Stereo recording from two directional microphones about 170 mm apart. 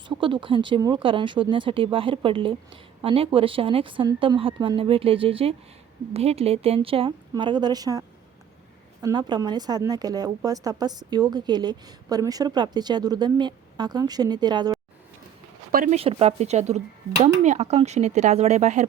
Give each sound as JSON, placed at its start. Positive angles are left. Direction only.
{"t": 0.1, "sound": "speech", "side_deg": -30}
{"t": 15.7, "sound": "speech", "side_deg": -55}
{"t": 16.0, "sound": "speech", "side_deg": -35}